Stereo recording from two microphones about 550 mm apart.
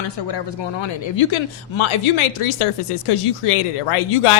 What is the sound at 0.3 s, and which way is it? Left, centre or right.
Speech, left.